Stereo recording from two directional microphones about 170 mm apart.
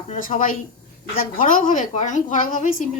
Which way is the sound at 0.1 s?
50° left (ahead or behind).